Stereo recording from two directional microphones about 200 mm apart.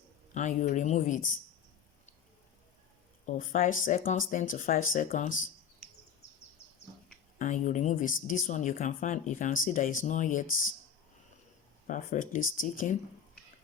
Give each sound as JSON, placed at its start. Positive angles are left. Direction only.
{"t": 0.3, "sound": "speech", "side_deg": 40}
{"t": 3.2, "sound": "speech", "side_deg": 40}
{"t": 6.2, "sound": "a sound", "side_deg": 35}
{"t": 7.3, "sound": "speech", "side_deg": 40}
{"t": 11.9, "sound": "speech", "side_deg": 40}